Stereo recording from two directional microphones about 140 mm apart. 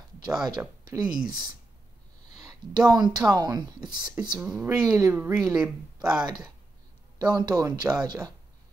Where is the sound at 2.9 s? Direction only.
30° right (ahead or behind).